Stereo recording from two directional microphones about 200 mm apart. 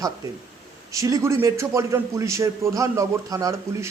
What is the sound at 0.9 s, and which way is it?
A man's voice, 15° right (ahead or behind).